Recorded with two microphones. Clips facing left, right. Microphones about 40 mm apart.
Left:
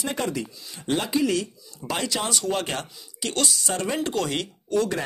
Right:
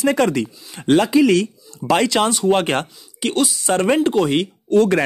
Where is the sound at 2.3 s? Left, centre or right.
Right.